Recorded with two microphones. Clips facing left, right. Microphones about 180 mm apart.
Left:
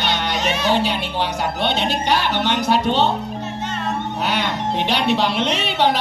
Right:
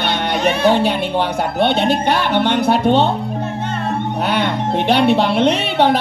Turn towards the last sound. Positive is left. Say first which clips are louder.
# right 4 dB
turn(degrees=-55)  # may be behind; listen again after turning